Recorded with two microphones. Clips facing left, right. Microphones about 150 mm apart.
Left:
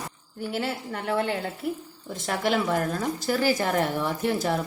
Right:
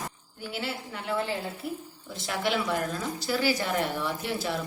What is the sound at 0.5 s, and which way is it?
Speech, 45° left (ahead or behind).